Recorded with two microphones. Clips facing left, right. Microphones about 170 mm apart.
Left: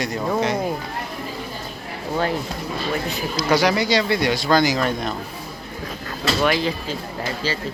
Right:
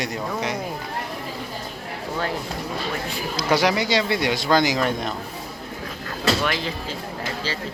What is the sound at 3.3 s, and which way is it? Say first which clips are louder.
Speech: left 2 dB; 25° right (ahead or behind).